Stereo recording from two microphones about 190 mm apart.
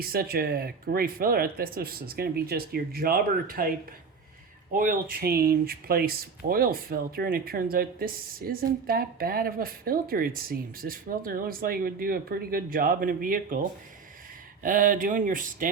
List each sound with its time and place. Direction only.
0.0 s speech: 50° right (ahead or behind)
4.7 s speech: 45° right (ahead or behind)